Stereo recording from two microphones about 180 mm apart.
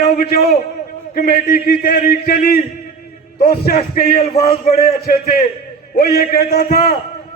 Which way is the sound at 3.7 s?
50° left (ahead or behind).